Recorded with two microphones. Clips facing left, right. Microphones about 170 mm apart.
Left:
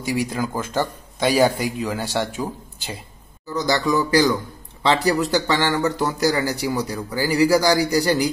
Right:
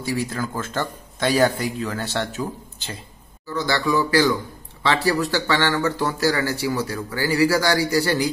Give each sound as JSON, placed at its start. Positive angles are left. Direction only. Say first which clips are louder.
{"t": 0.0, "sound": "speech", "louder": "left 2 dB", "side_deg": 15}